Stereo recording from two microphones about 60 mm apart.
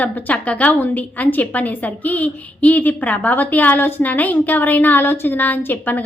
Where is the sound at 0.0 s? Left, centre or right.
Left.